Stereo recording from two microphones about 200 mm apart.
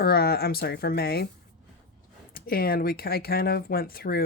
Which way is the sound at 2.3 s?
45° left (ahead or behind).